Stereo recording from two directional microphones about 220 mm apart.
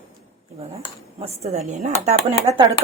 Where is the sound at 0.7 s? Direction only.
30° right (ahead or behind).